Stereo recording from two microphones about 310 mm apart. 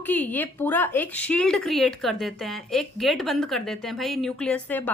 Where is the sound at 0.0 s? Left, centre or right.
Centre.